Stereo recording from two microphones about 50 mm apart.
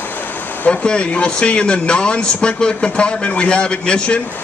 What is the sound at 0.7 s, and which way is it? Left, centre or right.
Speech, left.